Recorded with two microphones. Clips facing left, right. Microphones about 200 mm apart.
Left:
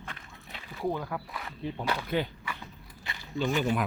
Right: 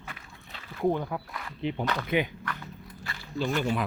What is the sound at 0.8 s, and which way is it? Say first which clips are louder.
Speech: right 5 dB; 15° right (ahead or behind).